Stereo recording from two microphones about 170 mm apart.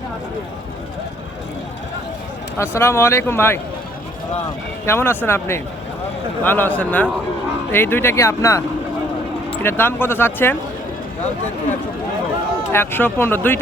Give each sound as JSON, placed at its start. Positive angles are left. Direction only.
{"t": 2.6, "sound": "speech", "side_deg": 15}
{"t": 4.9, "sound": "speech", "side_deg": 15}
{"t": 9.6, "sound": "speech", "side_deg": 15}
{"t": 12.7, "sound": "speech", "side_deg": 15}